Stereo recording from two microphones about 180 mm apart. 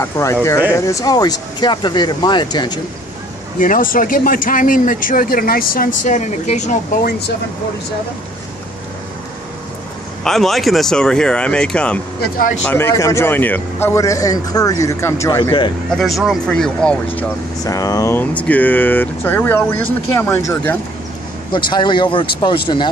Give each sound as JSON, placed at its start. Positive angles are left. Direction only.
{"t": 0.0, "sound": "speech", "side_deg": 15}
{"t": 3.5, "sound": "speech", "side_deg": 50}
{"t": 10.2, "sound": "speech", "side_deg": 0}
{"t": 16.0, "sound": "speech", "side_deg": 0}
{"t": 17.6, "sound": "speech", "side_deg": 20}
{"t": 21.5, "sound": "speech", "side_deg": 25}